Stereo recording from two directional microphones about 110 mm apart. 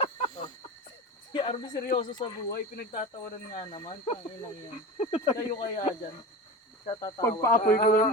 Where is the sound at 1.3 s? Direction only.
45° left (ahead or behind).